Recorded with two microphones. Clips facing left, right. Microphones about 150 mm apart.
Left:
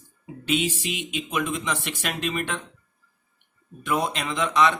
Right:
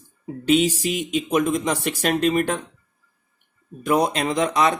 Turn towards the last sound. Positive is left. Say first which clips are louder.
# right 2 dB
turn(degrees=-40)  # may be behind; listen again after turning